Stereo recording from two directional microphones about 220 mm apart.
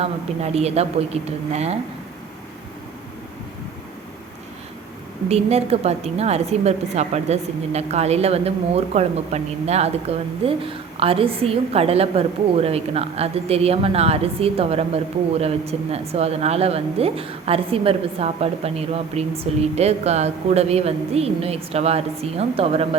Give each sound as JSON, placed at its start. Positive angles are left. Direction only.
{"t": 0.0, "sound": "a woman's voice", "side_deg": -30}
{"t": 5.3, "sound": "a woman's voice", "side_deg": -30}